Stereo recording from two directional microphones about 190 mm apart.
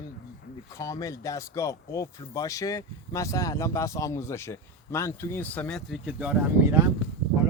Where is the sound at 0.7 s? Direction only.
15° left (ahead or behind); by 6.8 s 10° right (ahead or behind).